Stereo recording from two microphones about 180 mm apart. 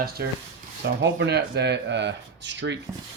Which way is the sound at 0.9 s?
80° right.